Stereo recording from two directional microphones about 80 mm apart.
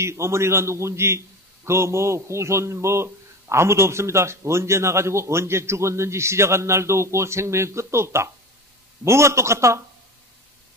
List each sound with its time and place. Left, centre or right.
0.0 s a man's voice: right